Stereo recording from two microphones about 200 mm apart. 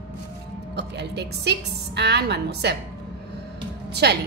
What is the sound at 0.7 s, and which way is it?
A woman's voice, 55° right (ahead or behind).